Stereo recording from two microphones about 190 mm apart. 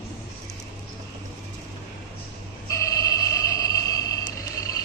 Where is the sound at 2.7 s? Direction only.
15° left (ahead or behind).